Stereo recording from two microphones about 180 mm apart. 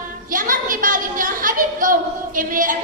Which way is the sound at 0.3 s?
50° right (ahead or behind).